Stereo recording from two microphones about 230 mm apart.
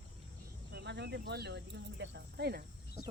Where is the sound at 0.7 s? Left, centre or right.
Right.